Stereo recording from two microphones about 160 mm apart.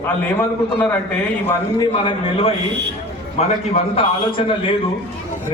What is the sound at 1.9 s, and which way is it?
Speech, 35° left (ahead or behind).